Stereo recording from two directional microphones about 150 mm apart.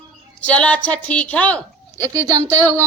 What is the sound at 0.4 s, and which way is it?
A woman's voice, 10° left (ahead or behind).